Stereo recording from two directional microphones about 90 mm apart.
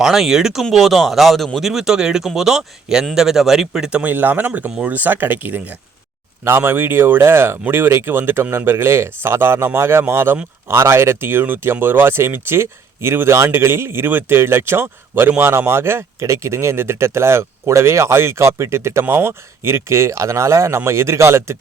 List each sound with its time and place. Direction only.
0.0 s speech: 5° right (ahead or behind); by 21.6 s 30° right (ahead or behind)